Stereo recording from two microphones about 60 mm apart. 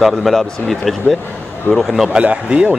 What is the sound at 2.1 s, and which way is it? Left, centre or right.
Speech, centre.